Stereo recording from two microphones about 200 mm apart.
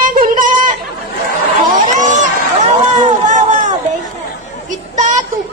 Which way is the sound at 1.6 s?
40° right (ahead or behind).